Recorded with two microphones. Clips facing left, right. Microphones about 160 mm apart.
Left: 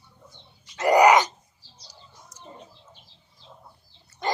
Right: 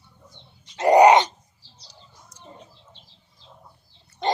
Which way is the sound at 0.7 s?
25° right (ahead or behind).